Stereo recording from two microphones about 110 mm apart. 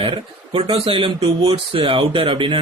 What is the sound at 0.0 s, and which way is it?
A man's voice, 50° right (ahead or behind).